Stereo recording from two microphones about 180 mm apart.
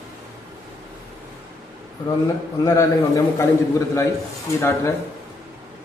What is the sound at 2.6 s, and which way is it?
A man's voice, 15° left (ahead or behind).